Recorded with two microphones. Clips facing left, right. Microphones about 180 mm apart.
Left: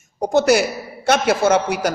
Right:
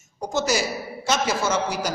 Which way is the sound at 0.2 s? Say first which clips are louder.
Left 8 dB; 60° left (ahead or behind).